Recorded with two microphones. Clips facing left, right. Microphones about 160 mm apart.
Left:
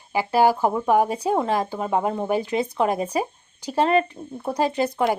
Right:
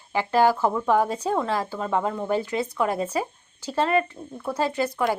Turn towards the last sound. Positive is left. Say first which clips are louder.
# left 2 dB
turn(degrees=20)  # may be behind; listen again after turning